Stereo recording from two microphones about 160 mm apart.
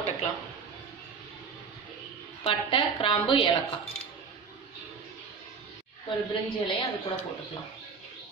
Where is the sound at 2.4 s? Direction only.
35° left (ahead or behind).